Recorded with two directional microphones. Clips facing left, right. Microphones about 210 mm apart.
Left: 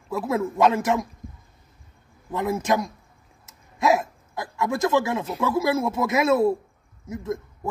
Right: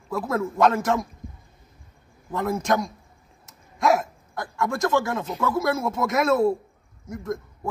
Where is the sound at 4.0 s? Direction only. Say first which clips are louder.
Even; 5° left (ahead or behind).